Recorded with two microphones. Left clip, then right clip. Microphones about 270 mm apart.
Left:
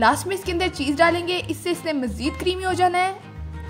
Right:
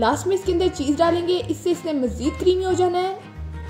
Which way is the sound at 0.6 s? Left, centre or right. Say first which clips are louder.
Left 4 dB; left.